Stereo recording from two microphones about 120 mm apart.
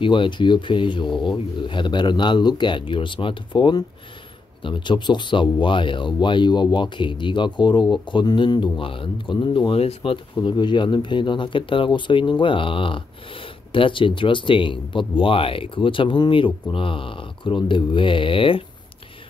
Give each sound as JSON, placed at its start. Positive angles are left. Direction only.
{"t": 0.0, "sound": "speech", "side_deg": 45}
{"t": 10.4, "sound": "speech", "side_deg": 40}